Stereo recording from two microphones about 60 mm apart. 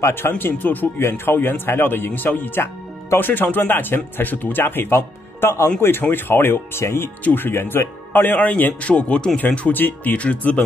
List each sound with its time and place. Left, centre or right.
0.0 s speech: left
9.6 s speech: left